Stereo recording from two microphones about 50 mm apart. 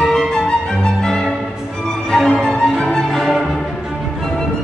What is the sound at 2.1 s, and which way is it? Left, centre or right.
Music, centre.